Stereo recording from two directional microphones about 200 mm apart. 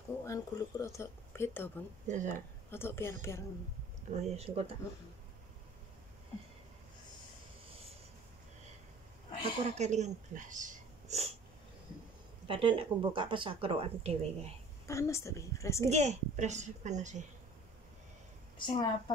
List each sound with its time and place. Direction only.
0.2 s speech: 15° left (ahead or behind)
2.0 s speech: 40° right (ahead or behind)
2.7 s speech: 10° left (ahead or behind)
4.1 s speech: 35° right (ahead or behind)
9.4 s speech: 35° right (ahead or behind)
12.4 s speech: 25° right (ahead or behind)
14.9 s speech: 15° left (ahead or behind)
15.9 s speech: 35° right (ahead or behind)
18.7 s a woman's voice: 20° left (ahead or behind)